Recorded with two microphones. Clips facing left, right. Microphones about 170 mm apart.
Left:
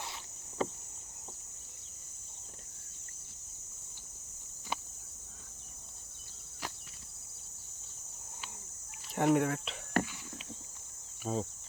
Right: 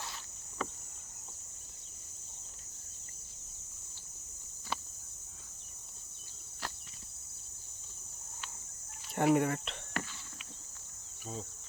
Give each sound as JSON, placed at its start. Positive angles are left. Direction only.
{"t": 0.6, "sound": "a sound", "side_deg": 25}
{"t": 9.1, "sound": "speech", "side_deg": 0}
{"t": 10.0, "sound": "horse", "side_deg": 50}
{"t": 11.3, "sound": "insect", "side_deg": 55}